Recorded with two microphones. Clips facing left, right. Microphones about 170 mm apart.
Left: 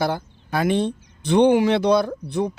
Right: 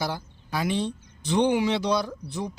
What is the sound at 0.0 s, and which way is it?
Speech, 55° left (ahead or behind).